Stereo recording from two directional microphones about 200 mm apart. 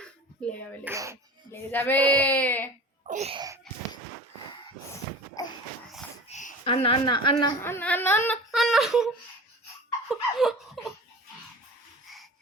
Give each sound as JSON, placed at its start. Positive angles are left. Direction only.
{"t": 0.4, "sound": "speech", "side_deg": 5}
{"t": 0.9, "sound": "speech", "side_deg": -15}
{"t": 1.7, "sound": "speech", "side_deg": 10}
{"t": 3.1, "sound": "wail", "side_deg": -30}
{"t": 6.2, "sound": "a child's voice", "side_deg": 35}
{"t": 7.4, "sound": "speech", "side_deg": 10}
{"t": 8.4, "sound": "speech", "side_deg": 0}
{"t": 10.1, "sound": "laughter", "side_deg": 0}